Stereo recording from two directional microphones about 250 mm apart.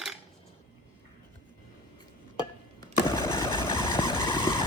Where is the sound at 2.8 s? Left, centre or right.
Centre.